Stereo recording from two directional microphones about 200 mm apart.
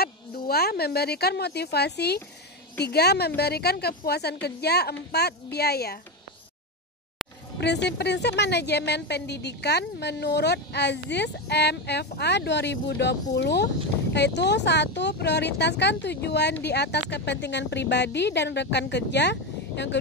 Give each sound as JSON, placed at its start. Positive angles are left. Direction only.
{"t": 0.0, "sound": "a woman's voice", "side_deg": 50}
{"t": 7.6, "sound": "a woman's voice", "side_deg": 60}